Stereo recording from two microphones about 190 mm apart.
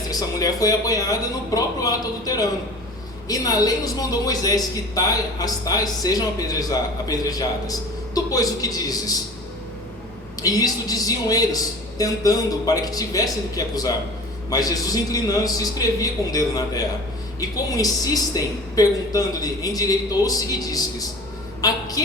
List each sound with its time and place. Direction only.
0.1 s a woman's voice: 20° left (ahead or behind)
10.4 s a woman's voice: 20° left (ahead or behind)
21.6 s a sound: 20° left (ahead or behind)